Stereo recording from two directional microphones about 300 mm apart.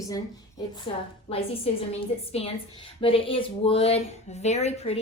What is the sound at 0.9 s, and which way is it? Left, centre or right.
A woman's voice, centre.